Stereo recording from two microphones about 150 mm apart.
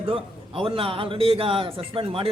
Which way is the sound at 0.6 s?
35° right (ahead or behind).